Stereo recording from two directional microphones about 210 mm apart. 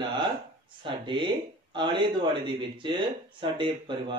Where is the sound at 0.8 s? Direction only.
20° right (ahead or behind).